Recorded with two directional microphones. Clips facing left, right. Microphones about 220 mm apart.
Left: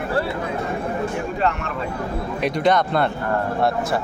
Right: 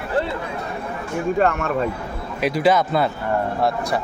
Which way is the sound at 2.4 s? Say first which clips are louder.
Right 2 dB; 5° right (ahead or behind).